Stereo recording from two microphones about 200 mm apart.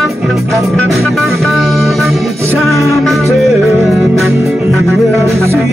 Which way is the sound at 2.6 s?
Centre (ahead or behind).